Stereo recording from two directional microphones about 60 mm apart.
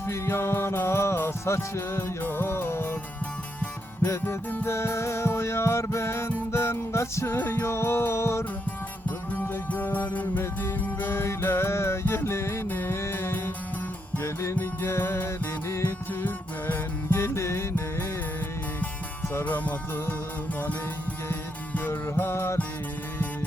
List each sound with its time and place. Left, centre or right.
0.1 s music: left
4.2 s music: left
9.0 s music: left
14.5 s music: left
16.2 s music: left
17.2 s music: left
19.5 s music: left
21.7 s music: left